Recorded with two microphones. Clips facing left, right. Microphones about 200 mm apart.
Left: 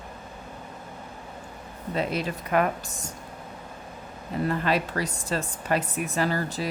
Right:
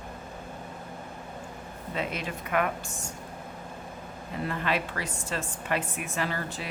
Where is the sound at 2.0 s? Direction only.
35° left (ahead or behind).